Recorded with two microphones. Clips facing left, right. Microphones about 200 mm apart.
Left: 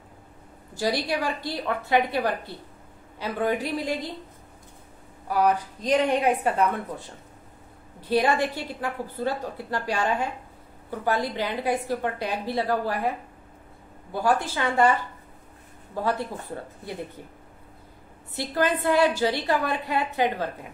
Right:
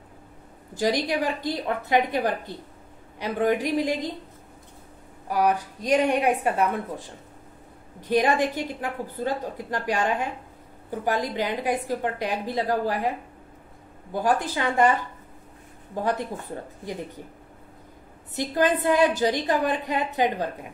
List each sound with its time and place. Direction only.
0.7 s a woman's voice: 15° right (ahead or behind)
5.3 s a woman's voice: 10° right (ahead or behind)
8.0 s a woman's voice: 15° right (ahead or behind)
14.1 s a woman's voice: 15° right (ahead or behind)
18.3 s a woman's voice: 20° right (ahead or behind)